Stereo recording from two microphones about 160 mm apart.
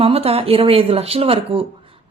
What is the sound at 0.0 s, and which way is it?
A woman's voice, 40° right (ahead or behind).